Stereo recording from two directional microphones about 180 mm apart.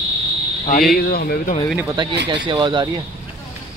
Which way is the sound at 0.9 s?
55° left (ahead or behind).